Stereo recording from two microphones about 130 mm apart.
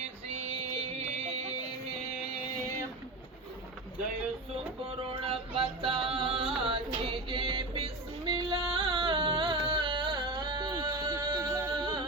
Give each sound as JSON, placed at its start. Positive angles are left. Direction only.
{"t": 0.8, "sound": "music", "side_deg": -60}
{"t": 5.2, "sound": "a sound", "side_deg": -50}
{"t": 6.6, "sound": "music", "side_deg": -45}